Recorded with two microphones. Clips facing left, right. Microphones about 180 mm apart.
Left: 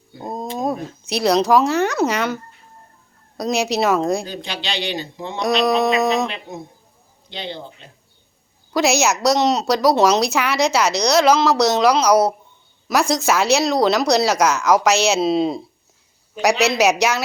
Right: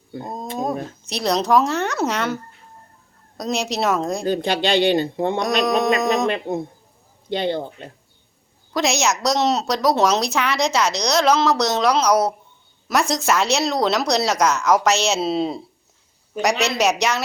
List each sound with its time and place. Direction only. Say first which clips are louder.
0.6 s a woman's voice: even; centre (ahead or behind)
4.3 s speech: right 9 dB; 50° right (ahead or behind)
8.7 s a woman's voice: left 3 dB; 5° left (ahead or behind)